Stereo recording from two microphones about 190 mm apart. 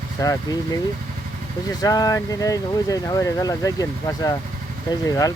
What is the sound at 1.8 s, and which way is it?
Speech, 20° left (ahead or behind).